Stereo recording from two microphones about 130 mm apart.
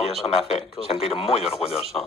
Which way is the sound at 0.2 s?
50° left (ahead or behind).